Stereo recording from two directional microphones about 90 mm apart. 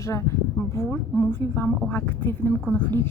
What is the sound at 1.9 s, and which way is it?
A woman's voice, 25° left (ahead or behind).